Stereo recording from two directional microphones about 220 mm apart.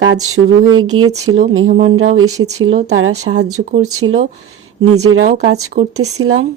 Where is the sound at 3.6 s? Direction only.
35° right (ahead or behind).